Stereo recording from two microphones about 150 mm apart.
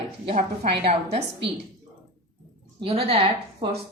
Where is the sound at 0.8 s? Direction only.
40° right (ahead or behind).